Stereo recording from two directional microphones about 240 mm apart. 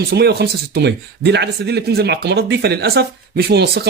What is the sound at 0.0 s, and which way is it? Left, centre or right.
Speech, right.